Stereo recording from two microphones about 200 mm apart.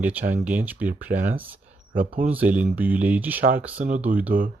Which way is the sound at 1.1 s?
45° right (ahead or behind).